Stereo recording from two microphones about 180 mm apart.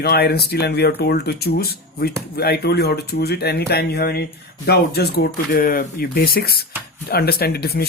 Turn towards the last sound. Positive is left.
turn(degrees=60)  # may be behind; listen again after turning